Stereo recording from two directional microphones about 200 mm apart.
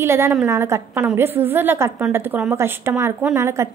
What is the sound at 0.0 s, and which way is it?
A woman's voice, 10° right (ahead or behind).